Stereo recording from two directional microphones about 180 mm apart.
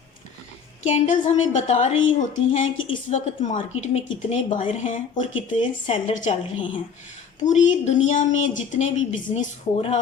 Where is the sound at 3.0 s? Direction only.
40° left (ahead or behind).